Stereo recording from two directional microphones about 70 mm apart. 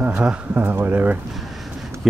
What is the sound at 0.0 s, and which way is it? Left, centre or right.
Speech, centre.